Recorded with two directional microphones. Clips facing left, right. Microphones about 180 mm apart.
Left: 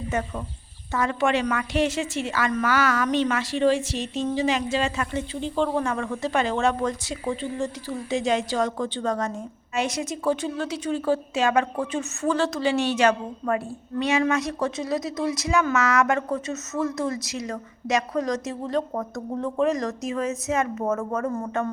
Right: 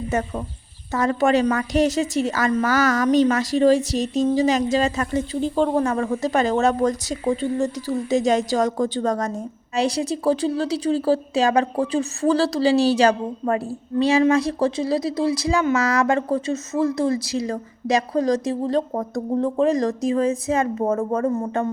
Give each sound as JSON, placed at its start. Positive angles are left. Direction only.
{"t": 0.1, "sound": "a woman's voice", "side_deg": -40}